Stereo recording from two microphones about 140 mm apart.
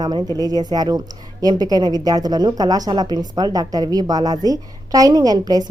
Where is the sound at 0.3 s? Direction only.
30° right (ahead or behind).